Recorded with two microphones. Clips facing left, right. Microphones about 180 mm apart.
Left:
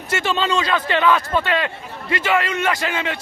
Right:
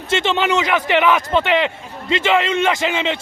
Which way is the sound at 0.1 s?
25° right (ahead or behind).